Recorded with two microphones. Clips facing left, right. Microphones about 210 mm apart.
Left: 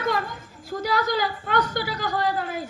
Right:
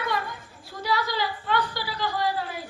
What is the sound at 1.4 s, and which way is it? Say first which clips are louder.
A woman's voice: left 3 dB; 45° left (ahead or behind).